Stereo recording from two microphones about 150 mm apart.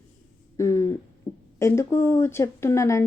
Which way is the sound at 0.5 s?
20° left (ahead or behind).